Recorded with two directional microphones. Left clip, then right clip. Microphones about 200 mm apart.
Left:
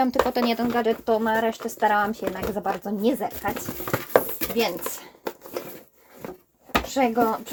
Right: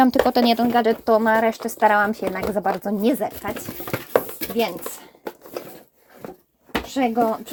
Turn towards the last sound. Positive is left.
turn(degrees=-35)  # may be behind; listen again after turning